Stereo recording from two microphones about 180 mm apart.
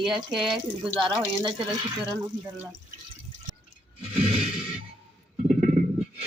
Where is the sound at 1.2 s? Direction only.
25° right (ahead or behind).